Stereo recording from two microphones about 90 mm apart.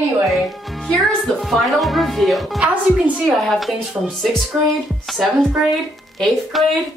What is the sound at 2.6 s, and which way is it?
Speech, 15° right (ahead or behind).